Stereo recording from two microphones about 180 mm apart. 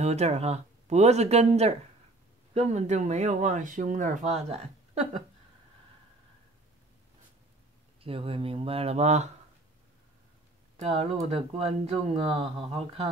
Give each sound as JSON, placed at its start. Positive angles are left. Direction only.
{"t": 0.0, "sound": "a woman's voice", "side_deg": -40}
{"t": 8.0, "sound": "speech", "side_deg": -30}
{"t": 10.8, "sound": "speech", "side_deg": -35}